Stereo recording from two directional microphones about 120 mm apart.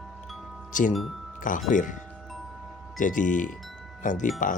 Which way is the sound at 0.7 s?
90° left.